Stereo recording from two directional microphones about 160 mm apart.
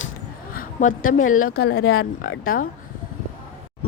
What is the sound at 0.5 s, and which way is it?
Speech, 55° left (ahead or behind).